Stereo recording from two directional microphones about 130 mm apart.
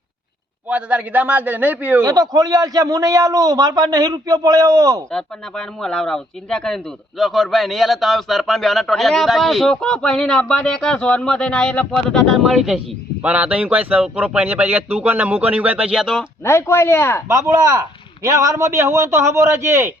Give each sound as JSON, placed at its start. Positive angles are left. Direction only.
{"t": 0.7, "sound": "speech", "side_deg": -10}
{"t": 2.0, "sound": "a man's voice", "side_deg": -30}
{"t": 5.1, "sound": "speech", "side_deg": 5}
{"t": 16.4, "sound": "speech", "side_deg": 20}
{"t": 17.2, "sound": "a man's voice", "side_deg": -20}